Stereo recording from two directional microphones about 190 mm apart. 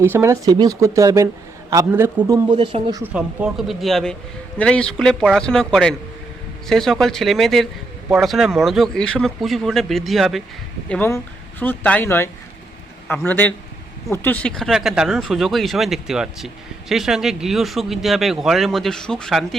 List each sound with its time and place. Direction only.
0.0 s speech: 10° right (ahead or behind)
2.5 s speech: 25° right (ahead or behind)
3.0 s speech: 5° right (ahead or behind)